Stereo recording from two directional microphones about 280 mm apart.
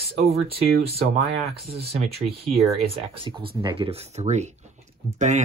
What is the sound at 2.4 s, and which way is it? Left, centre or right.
Speech, centre.